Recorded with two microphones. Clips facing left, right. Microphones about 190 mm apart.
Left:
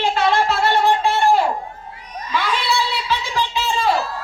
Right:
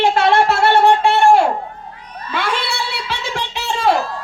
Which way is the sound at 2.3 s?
60° right (ahead or behind).